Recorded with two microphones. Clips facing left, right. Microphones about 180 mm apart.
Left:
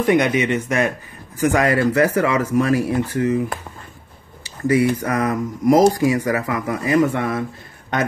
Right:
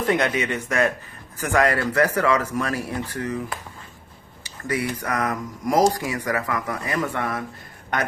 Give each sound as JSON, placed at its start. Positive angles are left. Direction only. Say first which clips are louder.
{"t": 0.0, "sound": "speech", "louder": "left 5 dB", "side_deg": 15}
{"t": 4.6, "sound": "speech", "louder": "left 9 dB", "side_deg": 25}